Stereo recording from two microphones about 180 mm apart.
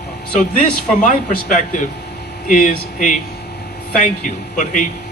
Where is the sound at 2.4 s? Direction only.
45° left (ahead or behind).